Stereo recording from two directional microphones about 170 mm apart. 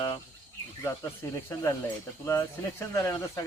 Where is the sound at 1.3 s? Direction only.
15° left (ahead or behind).